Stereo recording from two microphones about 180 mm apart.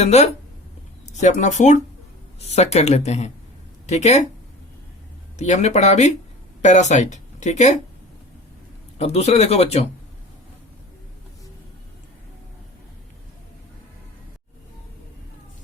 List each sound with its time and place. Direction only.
0.0 s speech: 35° left (ahead or behind)
5.4 s speech: 40° left (ahead or behind)
9.0 s speech: 35° left (ahead or behind)